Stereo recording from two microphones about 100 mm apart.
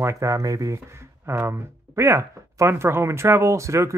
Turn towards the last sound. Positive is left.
turn(degrees=-30)  # may be behind; listen again after turning